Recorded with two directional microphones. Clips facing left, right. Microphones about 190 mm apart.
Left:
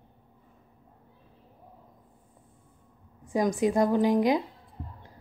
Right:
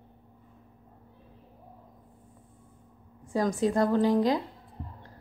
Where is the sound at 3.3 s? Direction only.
15° left (ahead or behind).